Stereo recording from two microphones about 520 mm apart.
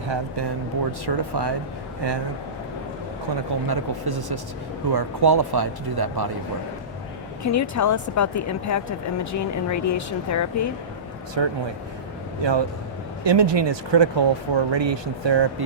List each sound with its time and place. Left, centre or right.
1.0 s speech: right
3.7 s speech: right
7.4 s speech: left
11.4 s speech: right